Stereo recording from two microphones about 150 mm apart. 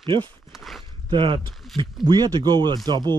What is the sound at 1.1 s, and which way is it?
Speech, 35° right (ahead or behind).